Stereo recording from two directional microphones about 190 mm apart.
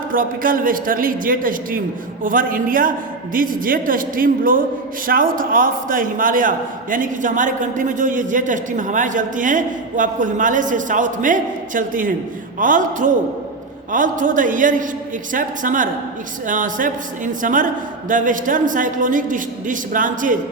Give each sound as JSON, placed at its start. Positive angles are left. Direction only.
{"t": 0.1, "sound": "a man's voice", "side_deg": -50}